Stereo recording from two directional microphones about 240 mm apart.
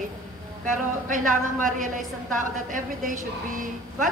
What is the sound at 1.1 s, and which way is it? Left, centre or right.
A woman's voice, right.